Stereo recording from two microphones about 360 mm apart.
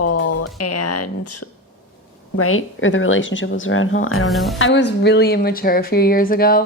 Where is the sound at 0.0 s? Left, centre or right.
Left.